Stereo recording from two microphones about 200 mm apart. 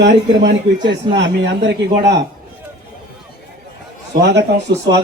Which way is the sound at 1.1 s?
60° right (ahead or behind).